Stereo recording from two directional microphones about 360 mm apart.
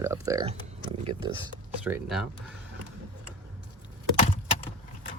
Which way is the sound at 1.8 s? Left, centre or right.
Centre.